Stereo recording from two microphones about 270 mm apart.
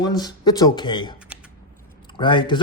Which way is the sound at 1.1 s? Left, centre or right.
Centre.